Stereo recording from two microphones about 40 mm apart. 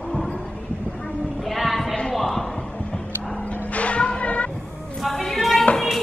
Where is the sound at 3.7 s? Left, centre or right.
Left.